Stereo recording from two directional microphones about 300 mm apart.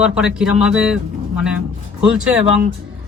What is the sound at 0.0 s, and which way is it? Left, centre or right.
Speech, centre.